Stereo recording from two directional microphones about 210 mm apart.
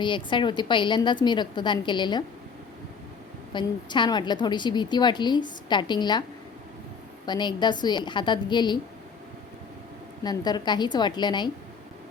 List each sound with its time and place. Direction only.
0.0 s a woman's voice: 25° left (ahead or behind)
3.5 s a woman's voice: 20° left (ahead or behind)
7.3 s a woman's voice: 20° left (ahead or behind)
10.2 s a woman's voice: 20° left (ahead or behind)